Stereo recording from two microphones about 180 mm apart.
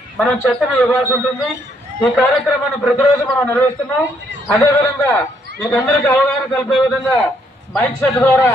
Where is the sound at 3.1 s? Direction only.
15° left (ahead or behind).